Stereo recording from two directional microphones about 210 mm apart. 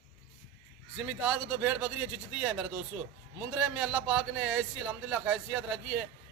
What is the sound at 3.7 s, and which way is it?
A man's voice, centre (ahead or behind).